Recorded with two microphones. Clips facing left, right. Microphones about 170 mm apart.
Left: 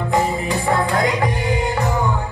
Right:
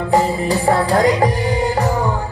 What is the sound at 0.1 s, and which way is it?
Music, 35° right (ahead or behind).